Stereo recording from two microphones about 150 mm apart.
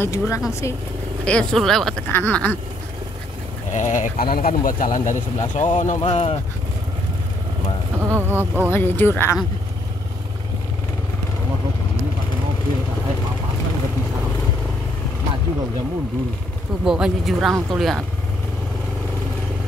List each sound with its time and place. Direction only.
0.0 s speech: 20° left (ahead or behind)
1.2 s speech: 5° left (ahead or behind)
3.7 s speech: 55° left (ahead or behind)
8.0 s speech: 15° right (ahead or behind)
8.7 s speech: 15° left (ahead or behind)
16.8 s speech: 5° right (ahead or behind)